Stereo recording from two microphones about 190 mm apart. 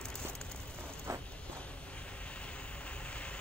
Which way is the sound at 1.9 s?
5° left (ahead or behind).